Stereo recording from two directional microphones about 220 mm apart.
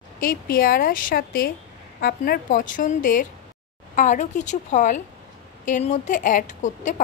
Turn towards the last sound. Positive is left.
turn(degrees=35)  # may be behind; listen again after turning